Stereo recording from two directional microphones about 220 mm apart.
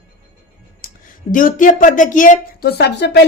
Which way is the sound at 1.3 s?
40° left (ahead or behind).